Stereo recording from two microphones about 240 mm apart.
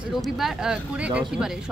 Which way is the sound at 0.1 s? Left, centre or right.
Centre.